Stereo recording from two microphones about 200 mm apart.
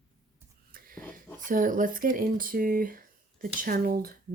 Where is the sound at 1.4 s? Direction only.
40° right (ahead or behind).